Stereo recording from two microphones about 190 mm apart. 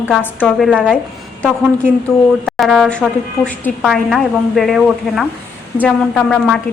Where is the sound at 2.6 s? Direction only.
Centre (ahead or behind).